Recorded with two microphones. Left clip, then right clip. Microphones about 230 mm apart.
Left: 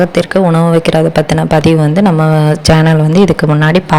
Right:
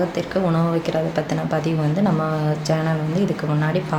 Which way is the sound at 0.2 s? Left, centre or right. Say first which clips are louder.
Left 11 dB; left.